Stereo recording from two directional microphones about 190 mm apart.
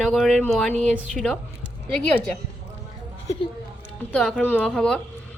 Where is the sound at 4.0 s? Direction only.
5° left (ahead or behind).